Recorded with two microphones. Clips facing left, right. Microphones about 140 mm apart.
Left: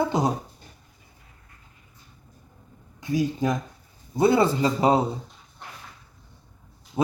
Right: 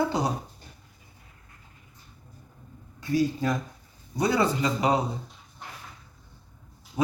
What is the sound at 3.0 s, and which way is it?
Speech, 20° left (ahead or behind).